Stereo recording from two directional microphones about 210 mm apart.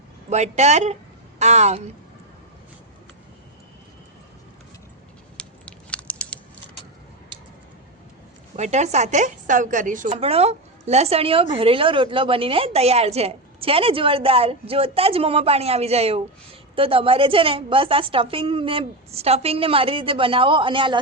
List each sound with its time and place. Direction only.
0.3 s speech: 30° right (ahead or behind)
5.4 s a sound: 5° left (ahead or behind)
8.5 s a woman's voice: 30° right (ahead or behind)